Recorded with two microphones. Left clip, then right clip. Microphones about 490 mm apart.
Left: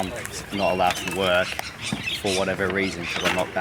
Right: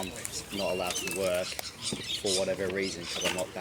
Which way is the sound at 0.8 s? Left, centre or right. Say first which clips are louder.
Left 9 dB; centre.